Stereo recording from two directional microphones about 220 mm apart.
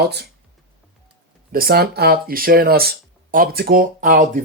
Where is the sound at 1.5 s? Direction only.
40° right (ahead or behind).